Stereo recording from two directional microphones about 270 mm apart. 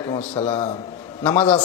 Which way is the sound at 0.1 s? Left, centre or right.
Left.